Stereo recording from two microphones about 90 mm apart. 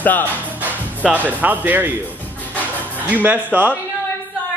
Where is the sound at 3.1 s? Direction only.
20° right (ahead or behind).